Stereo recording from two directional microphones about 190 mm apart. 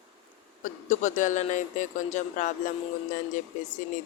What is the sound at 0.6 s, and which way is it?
Speech, 40° left (ahead or behind).